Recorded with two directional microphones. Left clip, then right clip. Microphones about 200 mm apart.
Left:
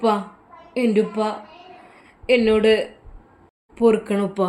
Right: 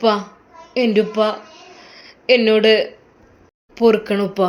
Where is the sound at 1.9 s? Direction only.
Centre (ahead or behind).